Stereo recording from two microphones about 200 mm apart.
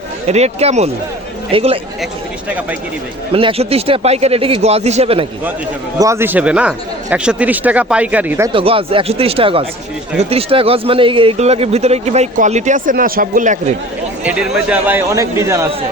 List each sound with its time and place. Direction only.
0.3 s a man's voice: 35° right (ahead or behind)
3.3 s speech: 30° right (ahead or behind)
6.0 s a man's voice: 15° right (ahead or behind)
8.5 s a man's voice: 25° right (ahead or behind)
14.3 s a man's voice: 5° right (ahead or behind)